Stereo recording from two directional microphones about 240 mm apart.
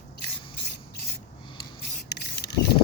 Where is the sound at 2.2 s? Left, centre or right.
Left.